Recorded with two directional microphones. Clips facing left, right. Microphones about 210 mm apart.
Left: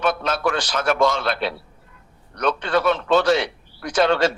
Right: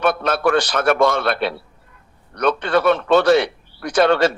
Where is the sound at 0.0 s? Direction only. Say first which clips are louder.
Right 4 dB; 60° right (ahead or behind).